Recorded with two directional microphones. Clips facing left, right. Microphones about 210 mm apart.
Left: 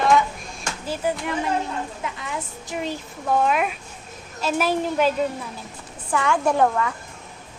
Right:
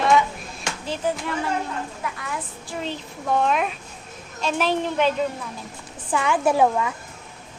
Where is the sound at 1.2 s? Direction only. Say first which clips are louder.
Left 1 dB; 20° left (ahead or behind).